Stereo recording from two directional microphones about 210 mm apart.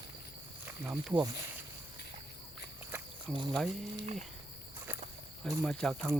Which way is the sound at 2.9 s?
10° right (ahead or behind).